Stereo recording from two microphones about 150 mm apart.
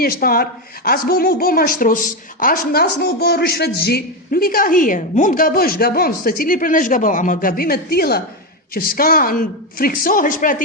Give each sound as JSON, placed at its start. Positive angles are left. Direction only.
{"t": 0.0, "sound": "speech", "side_deg": 80}